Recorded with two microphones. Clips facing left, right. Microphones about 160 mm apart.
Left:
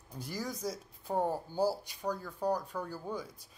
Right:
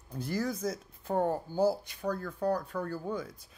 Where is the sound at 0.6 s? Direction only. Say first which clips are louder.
Right 4 dB; 10° left (ahead or behind).